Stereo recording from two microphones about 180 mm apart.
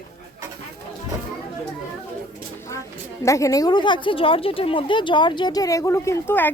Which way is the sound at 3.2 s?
15° left (ahead or behind).